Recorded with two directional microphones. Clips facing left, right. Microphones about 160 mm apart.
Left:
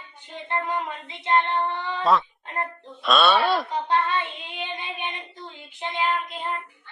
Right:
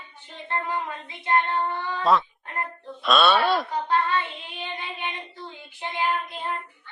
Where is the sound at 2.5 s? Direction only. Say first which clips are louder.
Left 2 dB; 20° left (ahead or behind).